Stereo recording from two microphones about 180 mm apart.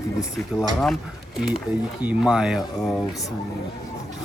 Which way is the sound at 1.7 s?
20° left (ahead or behind).